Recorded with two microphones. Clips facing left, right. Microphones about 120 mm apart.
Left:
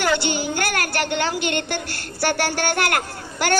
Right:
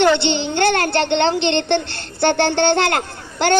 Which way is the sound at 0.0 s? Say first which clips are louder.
Right 6 dB; 25° right (ahead or behind).